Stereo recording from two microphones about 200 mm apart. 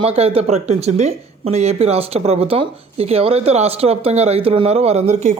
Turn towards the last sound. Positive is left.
turn(degrees=-35)  # may be behind; listen again after turning